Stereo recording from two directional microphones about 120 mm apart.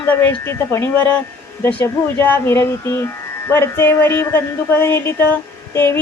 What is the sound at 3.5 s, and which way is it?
Speech, 20° left (ahead or behind).